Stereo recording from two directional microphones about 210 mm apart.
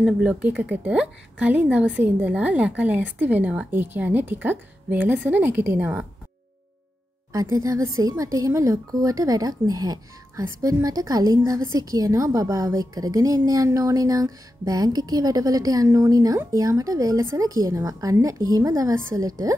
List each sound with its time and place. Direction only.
0.0 s a woman's voice: 5° right (ahead or behind)
7.3 s a woman's voice: 15° right (ahead or behind)